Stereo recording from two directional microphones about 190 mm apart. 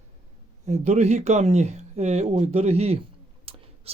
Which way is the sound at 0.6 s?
35° right (ahead or behind).